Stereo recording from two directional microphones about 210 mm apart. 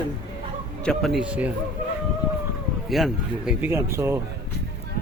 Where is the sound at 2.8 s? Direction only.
Centre (ahead or behind).